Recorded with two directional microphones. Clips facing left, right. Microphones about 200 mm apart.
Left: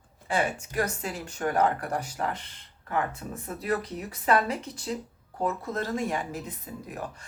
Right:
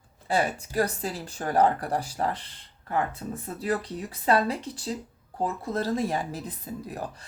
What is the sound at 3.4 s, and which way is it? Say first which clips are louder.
Speech: even; 30° right (ahead or behind).